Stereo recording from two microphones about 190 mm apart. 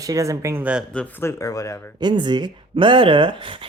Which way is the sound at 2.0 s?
25° right (ahead or behind).